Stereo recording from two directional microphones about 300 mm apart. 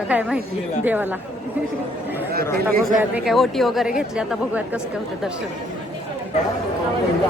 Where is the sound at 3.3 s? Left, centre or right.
Centre.